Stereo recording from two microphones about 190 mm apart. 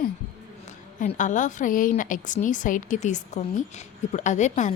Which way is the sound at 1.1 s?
40° left (ahead or behind).